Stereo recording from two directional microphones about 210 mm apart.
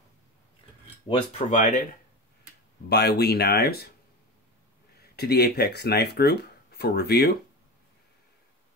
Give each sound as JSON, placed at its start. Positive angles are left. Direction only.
{"t": 1.0, "sound": "speech", "side_deg": 35}
{"t": 2.9, "sound": "speech", "side_deg": 50}
{"t": 5.1, "sound": "speech", "side_deg": 50}